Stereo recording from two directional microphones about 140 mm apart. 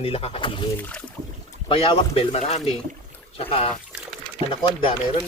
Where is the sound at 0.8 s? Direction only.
10° left (ahead or behind).